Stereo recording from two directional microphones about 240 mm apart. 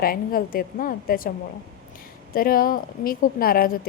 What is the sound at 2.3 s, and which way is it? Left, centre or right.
A woman's voice, left.